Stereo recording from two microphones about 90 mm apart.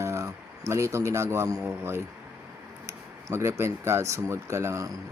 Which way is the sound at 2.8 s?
30° right (ahead or behind).